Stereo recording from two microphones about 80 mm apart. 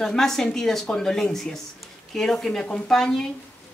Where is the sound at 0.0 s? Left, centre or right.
Centre.